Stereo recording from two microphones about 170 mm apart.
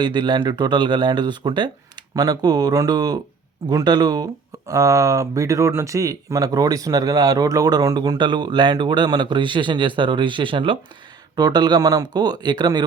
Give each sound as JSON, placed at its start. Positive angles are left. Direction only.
{"t": 0.0, "sound": "speech", "side_deg": -25}